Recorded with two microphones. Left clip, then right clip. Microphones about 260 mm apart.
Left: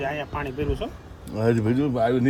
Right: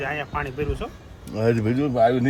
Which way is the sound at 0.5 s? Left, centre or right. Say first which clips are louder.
Even; right.